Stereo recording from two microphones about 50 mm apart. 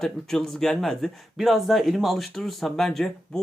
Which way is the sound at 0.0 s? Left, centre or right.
Centre.